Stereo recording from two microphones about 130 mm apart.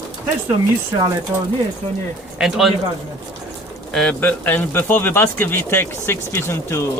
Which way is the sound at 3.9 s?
10° left (ahead or behind).